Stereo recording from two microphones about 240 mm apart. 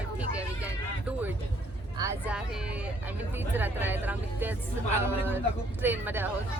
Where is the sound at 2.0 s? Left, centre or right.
Centre.